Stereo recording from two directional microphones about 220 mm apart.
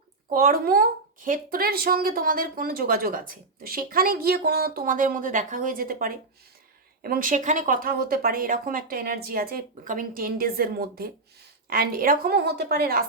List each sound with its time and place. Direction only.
0.3 s a woman's voice: 40° right (ahead or behind)